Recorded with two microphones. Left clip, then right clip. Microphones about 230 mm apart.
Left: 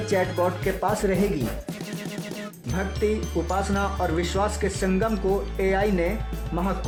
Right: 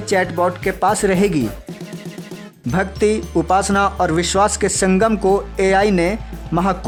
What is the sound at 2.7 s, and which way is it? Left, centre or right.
Speech, right.